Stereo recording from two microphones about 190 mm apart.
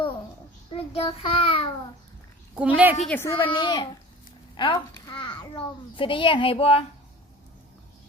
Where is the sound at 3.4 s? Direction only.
25° left (ahead or behind).